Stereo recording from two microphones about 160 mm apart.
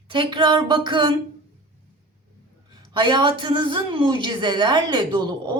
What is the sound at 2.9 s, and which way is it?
A woman's voice, 30° right (ahead or behind).